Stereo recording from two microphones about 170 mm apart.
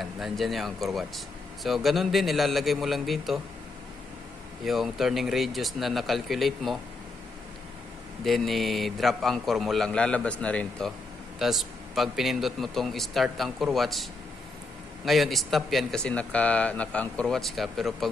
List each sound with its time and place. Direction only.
0.0 s speech: centre (ahead or behind)
4.6 s speech: centre (ahead or behind)
8.2 s speech: centre (ahead or behind)
15.0 s speech: centre (ahead or behind)